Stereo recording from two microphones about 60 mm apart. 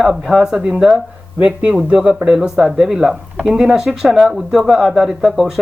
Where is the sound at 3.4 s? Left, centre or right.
Right.